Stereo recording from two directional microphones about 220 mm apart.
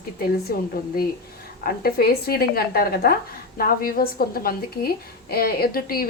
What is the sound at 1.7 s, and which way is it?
A woman's voice, 45° left (ahead or behind).